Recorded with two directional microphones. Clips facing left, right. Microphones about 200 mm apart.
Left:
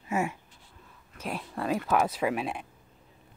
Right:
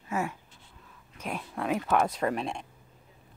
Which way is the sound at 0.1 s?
10° left (ahead or behind).